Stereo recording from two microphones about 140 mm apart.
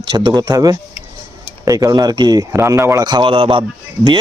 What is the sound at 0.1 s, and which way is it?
A man's voice, 30° right (ahead or behind).